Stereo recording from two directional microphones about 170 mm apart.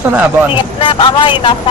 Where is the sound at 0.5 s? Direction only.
30° left (ahead or behind).